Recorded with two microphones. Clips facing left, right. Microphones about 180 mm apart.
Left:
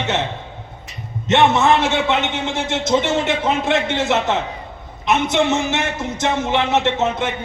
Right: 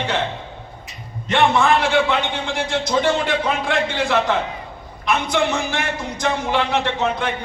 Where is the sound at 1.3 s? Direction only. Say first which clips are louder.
Left 2 dB; 25° left (ahead or behind).